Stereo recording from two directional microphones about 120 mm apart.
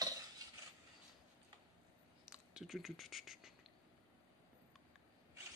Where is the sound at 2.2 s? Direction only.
5° right (ahead or behind).